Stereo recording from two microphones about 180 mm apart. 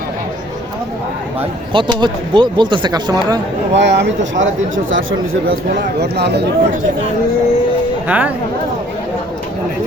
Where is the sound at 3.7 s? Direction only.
75° right (ahead or behind); by 5.0 s 90° right.